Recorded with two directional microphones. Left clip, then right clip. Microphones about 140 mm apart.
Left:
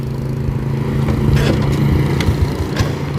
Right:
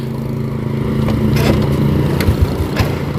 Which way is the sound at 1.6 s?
20° left (ahead or behind).